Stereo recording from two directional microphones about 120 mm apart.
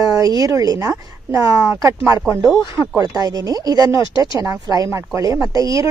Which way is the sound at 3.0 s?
30° right (ahead or behind).